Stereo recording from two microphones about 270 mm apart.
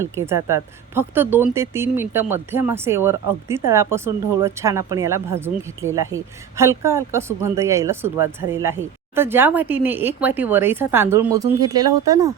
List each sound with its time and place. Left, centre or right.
0.0 s speech: centre